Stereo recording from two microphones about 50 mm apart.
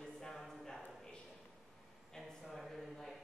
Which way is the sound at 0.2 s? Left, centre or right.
Centre.